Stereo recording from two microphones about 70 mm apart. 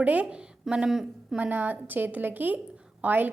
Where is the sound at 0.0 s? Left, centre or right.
Centre.